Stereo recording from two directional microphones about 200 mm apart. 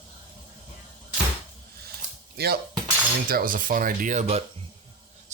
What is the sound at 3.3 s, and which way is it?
Speech, 45° right (ahead or behind).